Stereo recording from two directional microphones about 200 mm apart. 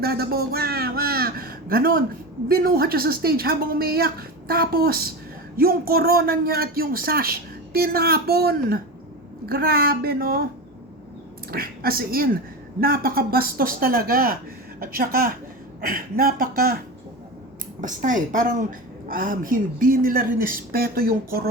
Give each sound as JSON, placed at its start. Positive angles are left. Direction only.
{"t": 0.0, "sound": "a man's voice", "side_deg": -50}
{"t": 11.5, "sound": "a man's voice", "side_deg": -50}
{"t": 17.7, "sound": "a woman's voice", "side_deg": -40}